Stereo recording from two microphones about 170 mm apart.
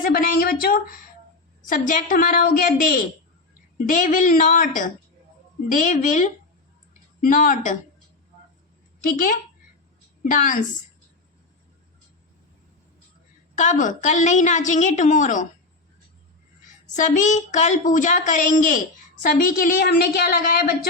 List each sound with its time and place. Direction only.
0.0 s a sound: 60° left (ahead or behind)
1.7 s a woman's voice: 50° left (ahead or behind)
10.2 s a woman's voice: 50° left (ahead or behind)
13.6 s a woman's voice: 50° left (ahead or behind)
16.9 s a woman's voice: 45° left (ahead or behind)